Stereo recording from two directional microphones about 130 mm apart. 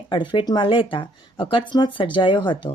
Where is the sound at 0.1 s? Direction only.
40° left (ahead or behind).